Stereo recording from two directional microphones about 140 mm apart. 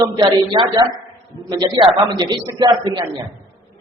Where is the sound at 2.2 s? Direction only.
30° right (ahead or behind).